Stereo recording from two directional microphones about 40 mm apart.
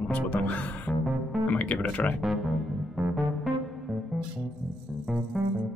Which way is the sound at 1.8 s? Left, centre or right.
Left.